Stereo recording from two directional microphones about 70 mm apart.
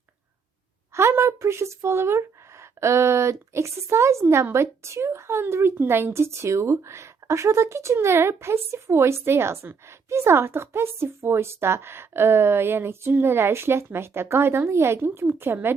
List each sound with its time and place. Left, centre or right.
0.9 s a woman's voice: right